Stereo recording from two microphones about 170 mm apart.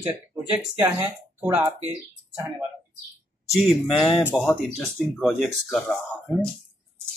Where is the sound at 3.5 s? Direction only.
Centre (ahead or behind).